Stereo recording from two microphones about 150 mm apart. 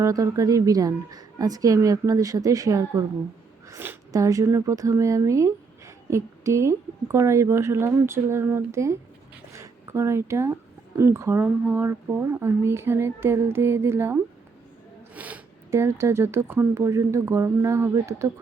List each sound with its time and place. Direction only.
0.0 s speech: 20° right (ahead or behind)